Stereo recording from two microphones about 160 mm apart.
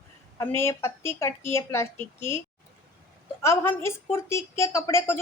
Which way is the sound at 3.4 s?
15° left (ahead or behind).